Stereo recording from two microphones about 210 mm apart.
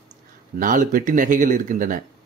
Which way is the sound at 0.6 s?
40° right (ahead or behind).